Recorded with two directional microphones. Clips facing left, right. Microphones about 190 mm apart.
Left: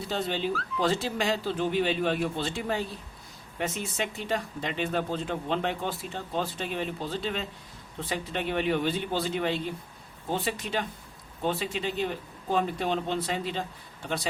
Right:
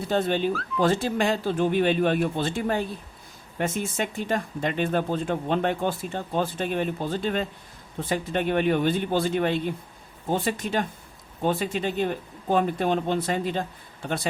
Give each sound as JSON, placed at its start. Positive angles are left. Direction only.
{"t": 0.1, "sound": "speech", "side_deg": -50}